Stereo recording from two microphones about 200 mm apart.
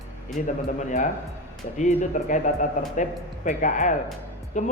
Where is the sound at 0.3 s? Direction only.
40° left (ahead or behind).